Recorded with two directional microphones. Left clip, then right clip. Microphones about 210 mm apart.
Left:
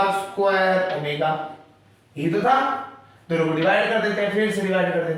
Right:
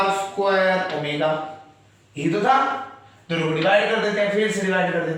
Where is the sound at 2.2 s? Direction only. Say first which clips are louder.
Right 1 dB; centre (ahead or behind).